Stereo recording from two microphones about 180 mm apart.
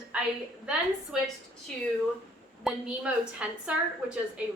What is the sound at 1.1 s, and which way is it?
Speech, 5° right (ahead or behind).